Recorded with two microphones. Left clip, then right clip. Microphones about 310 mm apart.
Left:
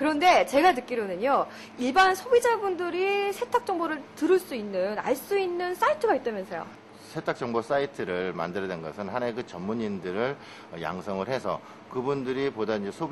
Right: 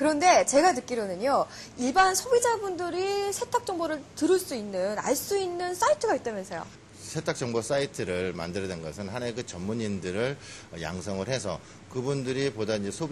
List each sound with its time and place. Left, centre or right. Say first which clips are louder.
0.0 s a woman's voice: even; right